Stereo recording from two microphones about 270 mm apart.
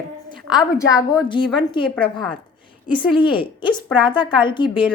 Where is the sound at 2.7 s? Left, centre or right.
Centre.